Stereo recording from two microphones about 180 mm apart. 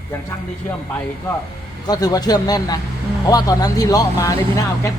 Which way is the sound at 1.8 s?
20° left (ahead or behind).